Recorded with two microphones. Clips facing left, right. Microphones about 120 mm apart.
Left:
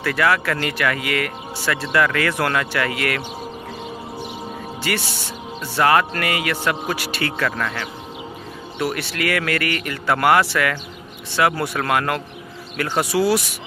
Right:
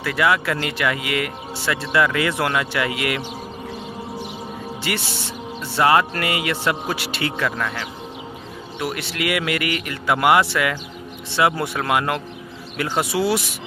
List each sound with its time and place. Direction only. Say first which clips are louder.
0.0 s speech: even; 15° right (ahead or behind)
4.9 s speech: left 2 dB; 20° right (ahead or behind)